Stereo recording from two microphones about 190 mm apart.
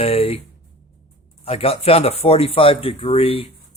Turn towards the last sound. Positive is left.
turn(degrees=30)  # may be behind; listen again after turning